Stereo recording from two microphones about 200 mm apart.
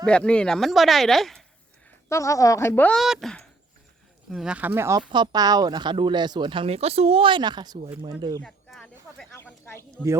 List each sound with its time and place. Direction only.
0.0 s speech: 5° left (ahead or behind)
2.0 s a woman's voice: 15° left (ahead or behind); by 8.4 s 20° right (ahead or behind)
8.4 s speech: 5° left (ahead or behind)